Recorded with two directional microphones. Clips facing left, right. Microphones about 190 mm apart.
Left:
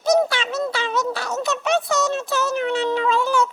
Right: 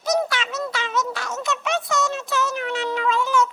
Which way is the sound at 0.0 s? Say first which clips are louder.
Left 4 dB; 30° left (ahead or behind).